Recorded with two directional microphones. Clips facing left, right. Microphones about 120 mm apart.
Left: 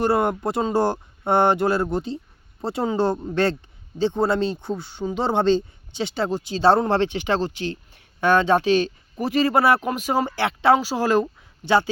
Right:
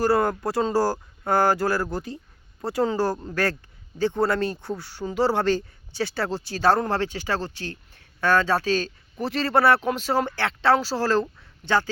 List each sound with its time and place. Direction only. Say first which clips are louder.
0.0 s speech: left 1 dB; 20° left (ahead or behind)
3.3 s speech: left 4 dB; 15° left (ahead or behind)